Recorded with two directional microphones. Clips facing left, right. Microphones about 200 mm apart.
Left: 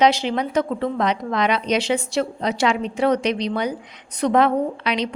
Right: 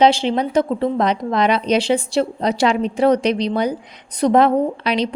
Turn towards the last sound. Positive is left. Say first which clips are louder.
# right 4 dB
turn(degrees=-35)  # may be behind; listen again after turning